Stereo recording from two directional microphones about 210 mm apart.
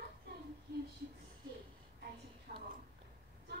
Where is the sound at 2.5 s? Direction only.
40° right (ahead or behind).